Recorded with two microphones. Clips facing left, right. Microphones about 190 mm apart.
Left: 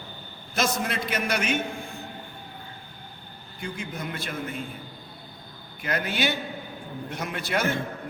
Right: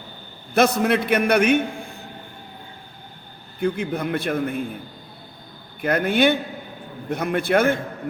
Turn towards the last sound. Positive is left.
turn(degrees=-55)  # may be behind; listen again after turning